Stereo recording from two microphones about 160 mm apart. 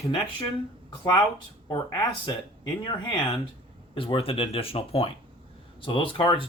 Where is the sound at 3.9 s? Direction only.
35° left (ahead or behind).